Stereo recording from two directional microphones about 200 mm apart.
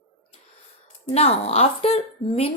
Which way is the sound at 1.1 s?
30° left (ahead or behind).